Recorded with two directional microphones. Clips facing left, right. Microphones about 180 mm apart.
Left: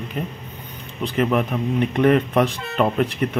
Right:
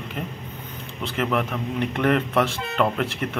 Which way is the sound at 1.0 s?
20° left (ahead or behind).